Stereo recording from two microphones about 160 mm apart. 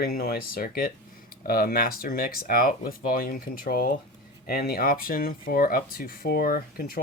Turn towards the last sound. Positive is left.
turn(degrees=70)  # may be behind; listen again after turning